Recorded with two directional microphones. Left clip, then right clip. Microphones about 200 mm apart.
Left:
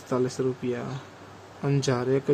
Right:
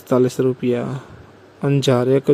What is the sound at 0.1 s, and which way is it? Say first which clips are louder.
Speech: right 10 dB; 30° right (ahead or behind).